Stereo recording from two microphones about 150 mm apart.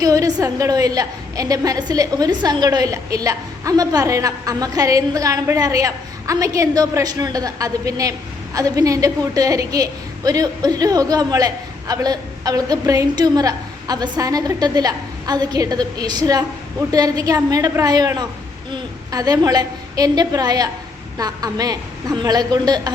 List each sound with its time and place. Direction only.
0.0 s a woman's voice: 25° right (ahead or behind)